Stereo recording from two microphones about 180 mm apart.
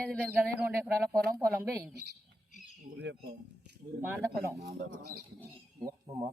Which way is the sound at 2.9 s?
80° right.